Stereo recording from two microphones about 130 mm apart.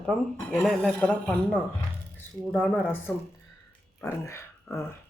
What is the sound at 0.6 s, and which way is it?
Speech, 5° left (ahead or behind).